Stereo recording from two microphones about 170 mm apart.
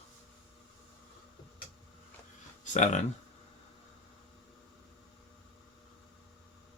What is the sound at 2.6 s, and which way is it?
Speech, 45° left (ahead or behind).